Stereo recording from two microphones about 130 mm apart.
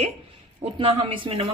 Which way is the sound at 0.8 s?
40° right (ahead or behind).